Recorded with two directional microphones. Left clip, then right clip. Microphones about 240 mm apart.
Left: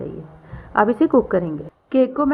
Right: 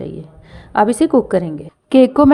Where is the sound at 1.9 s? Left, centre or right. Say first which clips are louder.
Right 7 dB; right.